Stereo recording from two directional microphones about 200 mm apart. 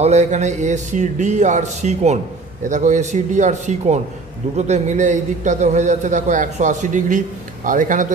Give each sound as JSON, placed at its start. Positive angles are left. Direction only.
{"t": 0.0, "sound": "a man's voice", "side_deg": -35}